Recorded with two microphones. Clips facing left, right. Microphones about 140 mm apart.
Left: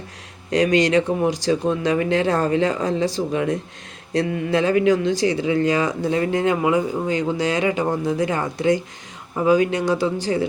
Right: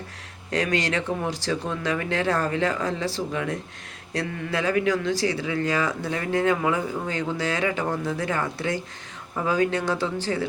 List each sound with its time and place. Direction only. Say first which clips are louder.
0.5 s speech: left 8 dB; 20° left (ahead or behind)